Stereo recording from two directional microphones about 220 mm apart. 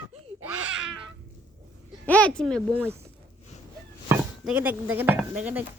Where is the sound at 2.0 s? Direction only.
5° left (ahead or behind).